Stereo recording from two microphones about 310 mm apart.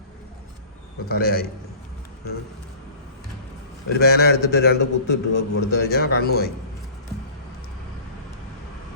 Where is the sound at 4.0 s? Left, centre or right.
Left.